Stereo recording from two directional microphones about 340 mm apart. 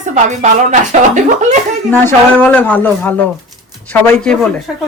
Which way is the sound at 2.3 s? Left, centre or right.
Centre.